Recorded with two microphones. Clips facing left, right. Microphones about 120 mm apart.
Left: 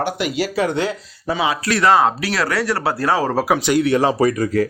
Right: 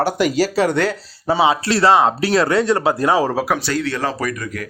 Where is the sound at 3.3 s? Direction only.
5° left (ahead or behind).